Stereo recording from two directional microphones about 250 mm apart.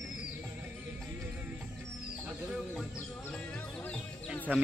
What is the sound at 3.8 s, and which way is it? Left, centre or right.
Music, centre.